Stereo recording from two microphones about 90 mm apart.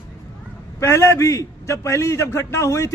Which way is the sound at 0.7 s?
30° left (ahead or behind).